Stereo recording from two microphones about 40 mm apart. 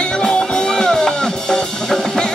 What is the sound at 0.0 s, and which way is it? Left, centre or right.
Music, left.